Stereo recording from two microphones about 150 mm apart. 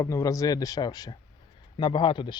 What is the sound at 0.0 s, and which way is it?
Speech, 20° left (ahead or behind).